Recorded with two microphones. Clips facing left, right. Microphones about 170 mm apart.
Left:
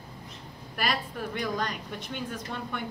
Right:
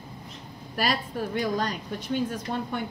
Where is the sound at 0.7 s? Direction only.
35° right (ahead or behind).